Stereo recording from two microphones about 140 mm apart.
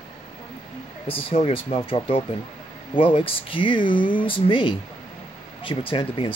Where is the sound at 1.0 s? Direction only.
40° left (ahead or behind).